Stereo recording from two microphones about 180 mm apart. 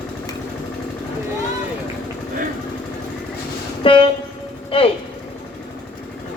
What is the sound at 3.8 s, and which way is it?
Train, 30° left (ahead or behind).